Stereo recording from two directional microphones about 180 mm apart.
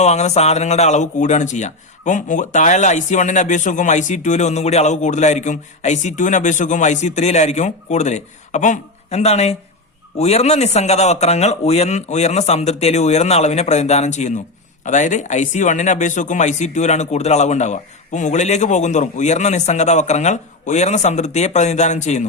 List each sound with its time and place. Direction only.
0.0 s speech: 40° left (ahead or behind)